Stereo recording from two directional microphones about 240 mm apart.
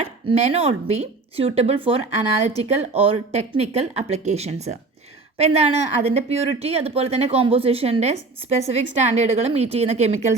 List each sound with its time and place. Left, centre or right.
0.0 s speech: right